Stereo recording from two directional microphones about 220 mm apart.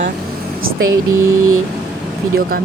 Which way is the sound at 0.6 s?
65° right (ahead or behind).